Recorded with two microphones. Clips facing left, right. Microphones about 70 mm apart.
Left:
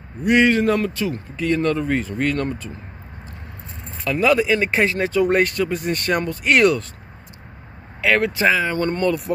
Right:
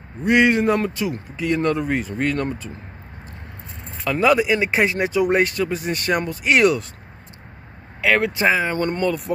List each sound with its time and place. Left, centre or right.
0.2 s speech: right
1.3 s speech: centre
4.0 s speech: right; by 6.8 s centre
8.0 s speech: right
9.0 s speech: centre